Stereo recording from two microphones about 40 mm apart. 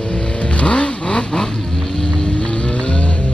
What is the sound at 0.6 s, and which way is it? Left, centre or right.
Vehicle, left.